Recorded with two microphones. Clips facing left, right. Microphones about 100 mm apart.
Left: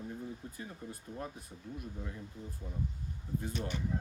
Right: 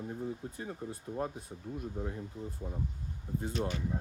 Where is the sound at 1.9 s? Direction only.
40° right (ahead or behind).